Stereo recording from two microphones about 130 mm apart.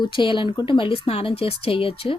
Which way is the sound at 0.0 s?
40° left (ahead or behind).